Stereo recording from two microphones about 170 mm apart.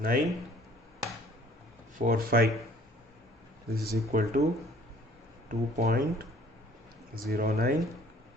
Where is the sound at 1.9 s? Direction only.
55° right (ahead or behind).